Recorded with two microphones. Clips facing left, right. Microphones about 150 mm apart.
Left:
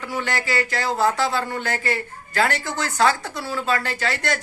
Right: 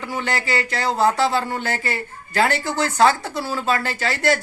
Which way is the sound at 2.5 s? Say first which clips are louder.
Right 4 dB; centre (ahead or behind).